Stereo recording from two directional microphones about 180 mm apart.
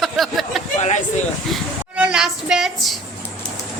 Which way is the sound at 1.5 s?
5° right (ahead or behind).